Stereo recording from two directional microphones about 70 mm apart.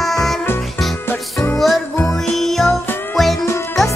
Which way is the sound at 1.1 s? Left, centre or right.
Left.